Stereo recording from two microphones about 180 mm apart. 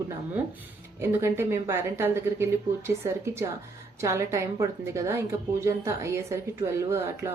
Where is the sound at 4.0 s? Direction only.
15° right (ahead or behind).